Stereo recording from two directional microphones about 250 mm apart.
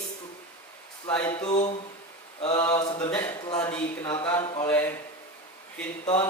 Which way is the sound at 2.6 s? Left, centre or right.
Centre.